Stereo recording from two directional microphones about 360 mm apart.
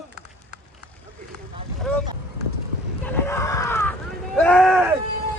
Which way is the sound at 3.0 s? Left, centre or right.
Centre.